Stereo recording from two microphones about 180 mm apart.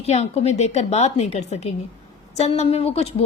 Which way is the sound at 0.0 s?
35° left (ahead or behind).